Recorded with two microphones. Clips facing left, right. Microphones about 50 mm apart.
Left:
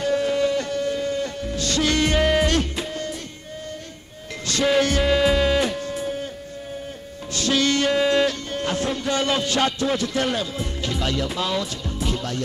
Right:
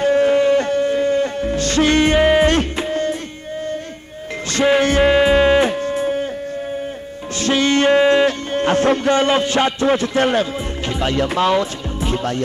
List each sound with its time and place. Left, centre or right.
0.0 s music: right
4.5 s music: right
7.3 s music: right
9.1 s speech: right
11.1 s speech: right
12.0 s music: right